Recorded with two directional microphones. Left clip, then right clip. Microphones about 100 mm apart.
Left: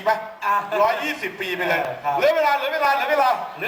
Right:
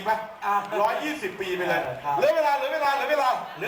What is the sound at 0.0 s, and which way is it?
A man's voice, 40° left (ahead or behind).